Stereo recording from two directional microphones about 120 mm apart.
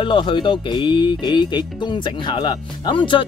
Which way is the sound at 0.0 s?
45° left (ahead or behind).